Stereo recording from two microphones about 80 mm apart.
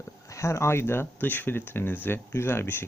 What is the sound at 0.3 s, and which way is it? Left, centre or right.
Speech, left.